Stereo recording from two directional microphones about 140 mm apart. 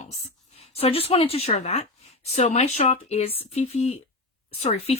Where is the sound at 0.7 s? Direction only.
45° left (ahead or behind).